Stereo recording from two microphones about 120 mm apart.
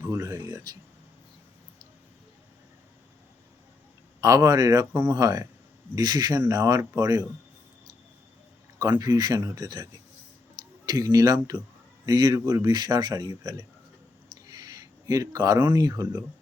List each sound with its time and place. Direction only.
0.0 s speech: 25° right (ahead or behind)
4.2 s speech: 30° right (ahead or behind)
8.8 s speech: 30° right (ahead or behind)
14.4 s a sound: 30° right (ahead or behind)
15.7 s speech: 30° right (ahead or behind)